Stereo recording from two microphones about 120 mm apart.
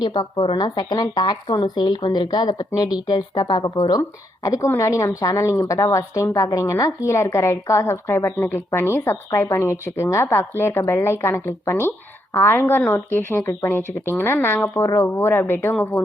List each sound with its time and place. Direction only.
0.0 s a woman's voice: 40° left (ahead or behind); by 16.0 s 15° left (ahead or behind)